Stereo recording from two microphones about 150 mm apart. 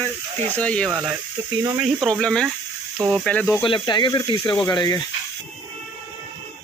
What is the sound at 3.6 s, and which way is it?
Speech, 30° left (ahead or behind).